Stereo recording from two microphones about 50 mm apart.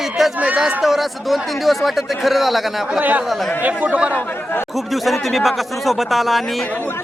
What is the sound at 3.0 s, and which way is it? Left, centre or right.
Speech, right.